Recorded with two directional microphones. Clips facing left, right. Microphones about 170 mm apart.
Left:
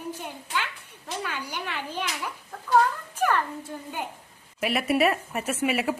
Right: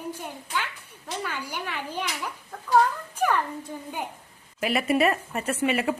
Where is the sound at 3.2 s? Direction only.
10° right (ahead or behind).